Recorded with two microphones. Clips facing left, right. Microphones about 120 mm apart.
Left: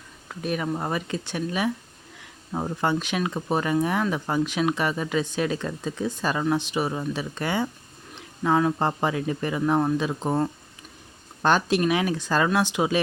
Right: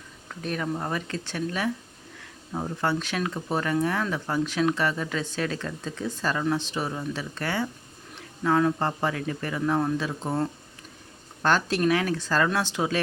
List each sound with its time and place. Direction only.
0.3 s speech: 10° left (ahead or behind)